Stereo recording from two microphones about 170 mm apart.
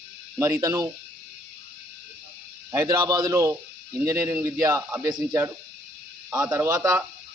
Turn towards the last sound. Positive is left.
turn(degrees=-20)  # may be behind; listen again after turning